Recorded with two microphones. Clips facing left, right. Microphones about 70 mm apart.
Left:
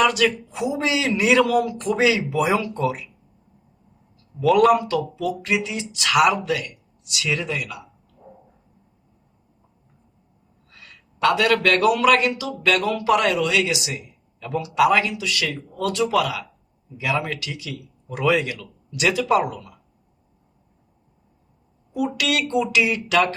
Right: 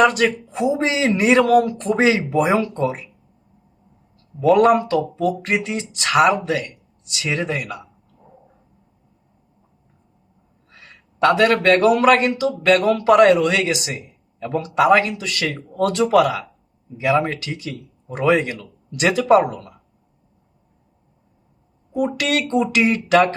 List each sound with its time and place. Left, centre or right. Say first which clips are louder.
0.0 s a man's voice: right 3 dB; right
4.5 s a man's voice: right 2 dB; right
10.7 s a man's voice: right 2 dB; right
21.9 s a man's voice: right 3 dB; right